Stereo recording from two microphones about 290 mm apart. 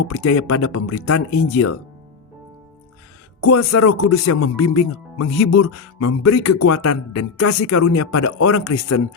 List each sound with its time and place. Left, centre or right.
0.1 s speech: left
3.5 s speech: left